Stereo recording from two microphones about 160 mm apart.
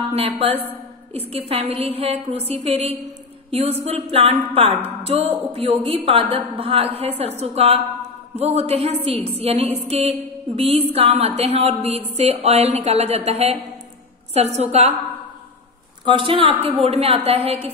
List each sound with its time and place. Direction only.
0.1 s a woman's voice: 40° right (ahead or behind)
5.0 s music: 40° right (ahead or behind)
5.5 s a woman's voice: 40° right (ahead or behind)
16.1 s a woman's voice: 30° right (ahead or behind)